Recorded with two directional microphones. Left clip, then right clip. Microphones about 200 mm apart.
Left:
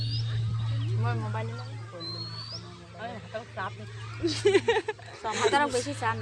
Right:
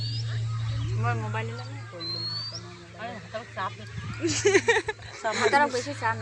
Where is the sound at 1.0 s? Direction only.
45° right (ahead or behind).